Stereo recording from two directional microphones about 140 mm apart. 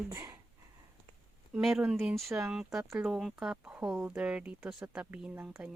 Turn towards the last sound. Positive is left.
turn(degrees=-10)  # may be behind; listen again after turning